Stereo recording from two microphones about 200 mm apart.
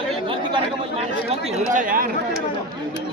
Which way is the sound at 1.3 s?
40° right (ahead or behind).